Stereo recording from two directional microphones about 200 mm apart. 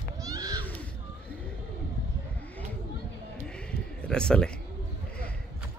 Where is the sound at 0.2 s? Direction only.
15° right (ahead or behind).